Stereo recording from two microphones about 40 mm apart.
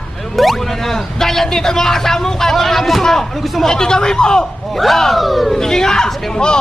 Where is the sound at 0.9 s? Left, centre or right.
Centre.